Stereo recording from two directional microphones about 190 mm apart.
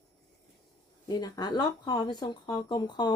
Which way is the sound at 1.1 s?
20° left (ahead or behind).